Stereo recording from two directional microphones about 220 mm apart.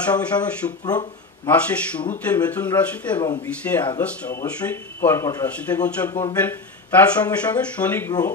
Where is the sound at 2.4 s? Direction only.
5° left (ahead or behind).